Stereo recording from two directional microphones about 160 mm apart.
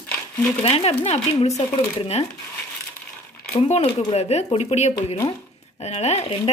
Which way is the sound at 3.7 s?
40° left (ahead or behind).